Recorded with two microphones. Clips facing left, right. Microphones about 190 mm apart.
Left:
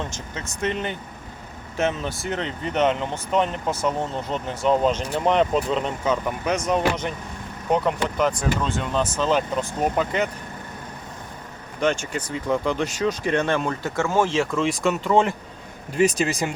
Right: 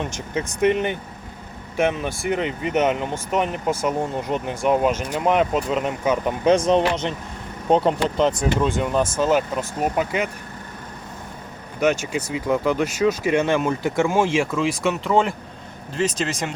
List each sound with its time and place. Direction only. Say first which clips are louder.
0.0 s speech: right 6 dB; 15° right (ahead or behind)
6.2 s speech: right 6 dB; 30° right (ahead or behind)
8.6 s speech: right 4 dB; 10° right (ahead or behind)
11.8 s speech: right 3 dB; 10° right (ahead or behind); by 16.4 s 10° left (ahead or behind)